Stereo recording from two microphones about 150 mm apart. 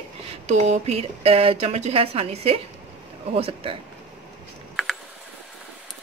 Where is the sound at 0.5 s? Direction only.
50° right (ahead or behind).